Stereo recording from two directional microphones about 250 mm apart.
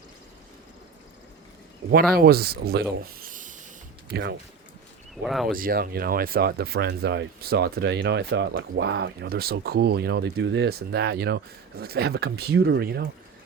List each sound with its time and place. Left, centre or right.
2.1 s speech: right
3.0 s a sound: right
4.1 s speech: right
5.2 s speech: centre
5.5 s speech: right